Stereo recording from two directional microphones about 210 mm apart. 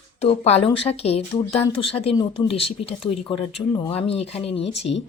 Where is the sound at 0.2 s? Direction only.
30° left (ahead or behind).